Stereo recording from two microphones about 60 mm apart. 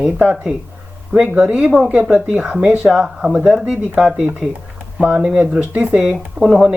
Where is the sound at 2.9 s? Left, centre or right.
Centre.